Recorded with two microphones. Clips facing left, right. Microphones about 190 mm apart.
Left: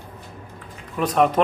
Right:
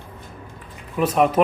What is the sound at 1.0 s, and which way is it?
Speech, 5° right (ahead or behind).